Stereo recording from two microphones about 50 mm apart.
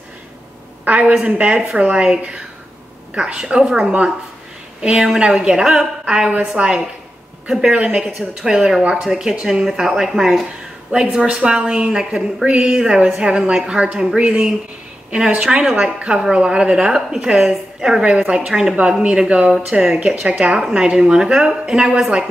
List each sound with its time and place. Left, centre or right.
0.8 s a woman's voice: right
3.2 s a woman's voice: centre
4.9 s a woman's voice: centre